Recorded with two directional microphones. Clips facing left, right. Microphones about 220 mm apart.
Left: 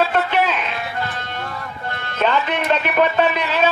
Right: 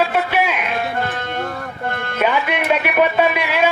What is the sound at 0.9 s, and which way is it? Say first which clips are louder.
Music: right 4 dB; 50° right (ahead or behind).